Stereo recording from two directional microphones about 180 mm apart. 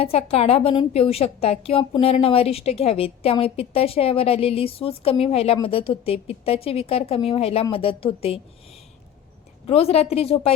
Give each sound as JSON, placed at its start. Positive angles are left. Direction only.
{"t": 0.0, "sound": "a woman's voice", "side_deg": 35}
{"t": 9.6, "sound": "a woman's voice", "side_deg": 35}